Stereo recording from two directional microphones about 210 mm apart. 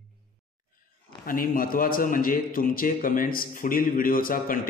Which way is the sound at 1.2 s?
40° left (ahead or behind).